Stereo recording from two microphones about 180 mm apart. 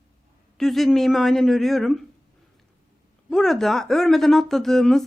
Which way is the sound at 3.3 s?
Centre (ahead or behind).